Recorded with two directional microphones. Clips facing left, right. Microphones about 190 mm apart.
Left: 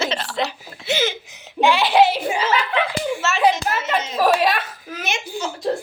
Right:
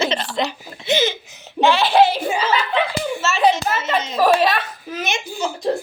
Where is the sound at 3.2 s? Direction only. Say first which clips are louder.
Right 2 dB; 15° left (ahead or behind).